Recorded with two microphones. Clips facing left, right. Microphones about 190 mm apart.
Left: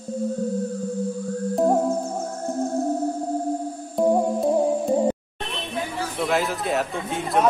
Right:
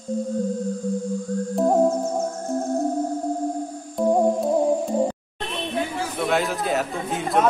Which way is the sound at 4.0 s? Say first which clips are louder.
Left 1 dB; centre (ahead or behind).